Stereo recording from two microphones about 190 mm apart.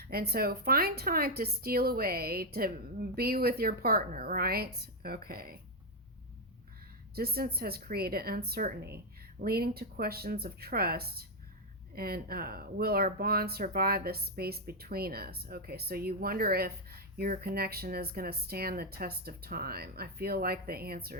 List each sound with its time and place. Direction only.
0.0 s a woman's voice: 55° right (ahead or behind)
7.2 s a woman's voice: 55° right (ahead or behind)